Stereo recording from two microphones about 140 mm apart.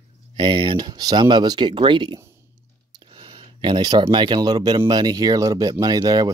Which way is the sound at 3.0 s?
40° right (ahead or behind).